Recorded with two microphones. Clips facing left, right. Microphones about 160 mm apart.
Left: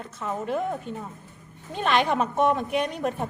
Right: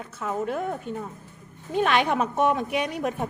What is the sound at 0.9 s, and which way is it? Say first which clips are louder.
Speech: right 2 dB; 50° right (ahead or behind).